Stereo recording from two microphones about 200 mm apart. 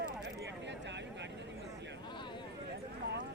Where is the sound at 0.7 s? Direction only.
60° right (ahead or behind).